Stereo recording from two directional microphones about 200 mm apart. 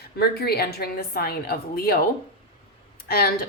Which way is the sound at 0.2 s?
50° left (ahead or behind).